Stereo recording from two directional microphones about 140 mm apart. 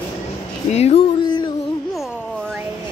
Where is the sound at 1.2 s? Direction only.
30° left (ahead or behind).